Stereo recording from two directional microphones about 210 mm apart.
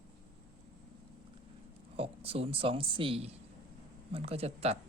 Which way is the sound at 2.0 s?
25° right (ahead or behind).